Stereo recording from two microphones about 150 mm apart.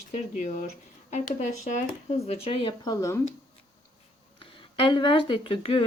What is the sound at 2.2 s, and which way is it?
Speech, 45° left (ahead or behind).